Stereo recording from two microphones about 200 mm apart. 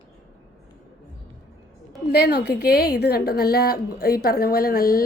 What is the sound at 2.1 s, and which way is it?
A woman's voice, 55° left (ahead or behind).